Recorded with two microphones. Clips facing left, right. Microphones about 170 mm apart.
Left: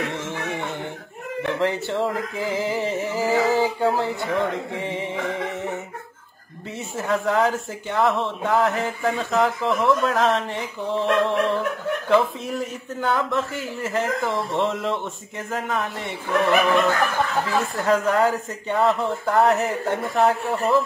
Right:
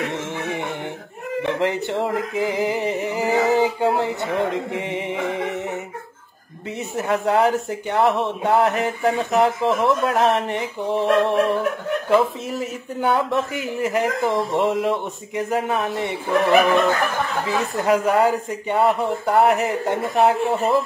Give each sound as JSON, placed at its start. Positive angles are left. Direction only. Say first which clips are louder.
{"t": 0.0, "sound": "music", "louder": "right 2 dB", "side_deg": -15}
{"t": 1.4, "sound": "speech", "louder": "right 1 dB", "side_deg": -20}
{"t": 7.0, "sound": "speech", "louder": "right 2 dB", "side_deg": -15}
{"t": 12.1, "sound": "a man's voice", "louder": "right 1 dB", "side_deg": 0}
{"t": 13.0, "sound": "speech", "louder": "right 3 dB", "side_deg": -15}